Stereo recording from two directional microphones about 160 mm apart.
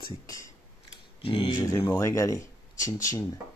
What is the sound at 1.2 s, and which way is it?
Speech, 35° left (ahead or behind).